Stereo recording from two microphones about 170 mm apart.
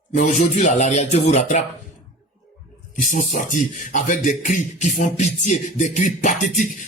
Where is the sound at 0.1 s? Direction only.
45° left (ahead or behind).